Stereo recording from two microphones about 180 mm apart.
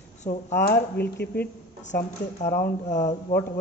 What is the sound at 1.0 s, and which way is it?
Speech, 60° left (ahead or behind).